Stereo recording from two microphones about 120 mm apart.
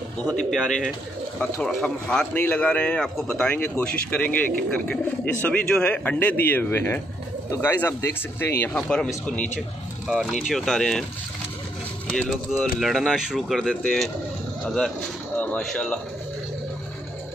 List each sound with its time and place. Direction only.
0.4 s speech: 5° left (ahead or behind)
2.3 s speech: 15° left (ahead or behind)
8.7 s speech: 10° left (ahead or behind)
10.5 s speech: 5° left (ahead or behind)
12.1 s speech: 5° left (ahead or behind)
15.3 s a sound: 15° left (ahead or behind)
15.6 s speech: 5° left (ahead or behind)